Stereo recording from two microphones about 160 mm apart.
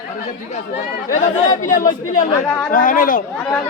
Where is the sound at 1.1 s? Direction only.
50° left (ahead or behind).